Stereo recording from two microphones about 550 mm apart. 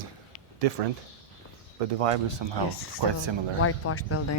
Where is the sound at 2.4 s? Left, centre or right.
Right.